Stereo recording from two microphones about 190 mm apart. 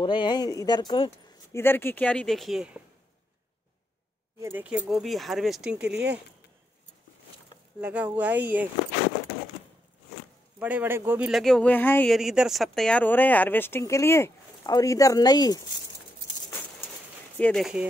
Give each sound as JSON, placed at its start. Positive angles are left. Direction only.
{"t": 0.0, "sound": "speech", "side_deg": 25}
{"t": 1.5, "sound": "speech", "side_deg": 10}
{"t": 4.4, "sound": "speech", "side_deg": -10}
{"t": 7.8, "sound": "speech", "side_deg": -10}
{"t": 10.6, "sound": "speech", "side_deg": -10}
{"t": 12.1, "sound": "speech", "side_deg": -5}
{"t": 17.4, "sound": "speech", "side_deg": 5}